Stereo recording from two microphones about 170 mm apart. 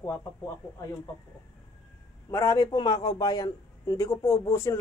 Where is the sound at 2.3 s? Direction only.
20° left (ahead or behind).